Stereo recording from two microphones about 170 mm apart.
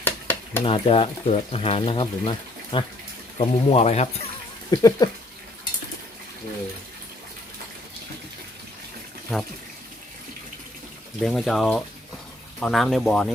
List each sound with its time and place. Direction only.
0.0 s stir: 10° left (ahead or behind)
0.6 s speech: 30° left (ahead or behind)
4.7 s speech: 20° left (ahead or behind)
11.2 s speech: centre (ahead or behind)